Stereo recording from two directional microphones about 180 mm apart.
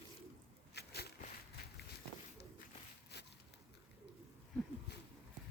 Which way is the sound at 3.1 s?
70° left (ahead or behind).